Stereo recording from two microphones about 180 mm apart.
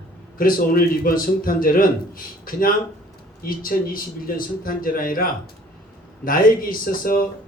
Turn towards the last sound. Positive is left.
turn(degrees=50)  # may be behind; listen again after turning